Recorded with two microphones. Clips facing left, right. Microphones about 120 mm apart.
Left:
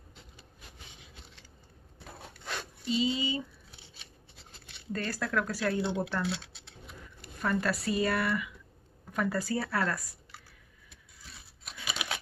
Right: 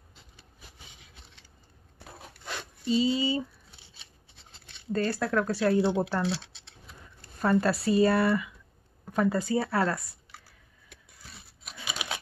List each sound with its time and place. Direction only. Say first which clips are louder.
2.9 s speech: right 5 dB; 35° right (ahead or behind)
4.9 s speech: right 5 dB; 30° right (ahead or behind)
7.4 s speech: right 6 dB; 30° right (ahead or behind)
11.7 s a sound: right 1 dB; 30° right (ahead or behind)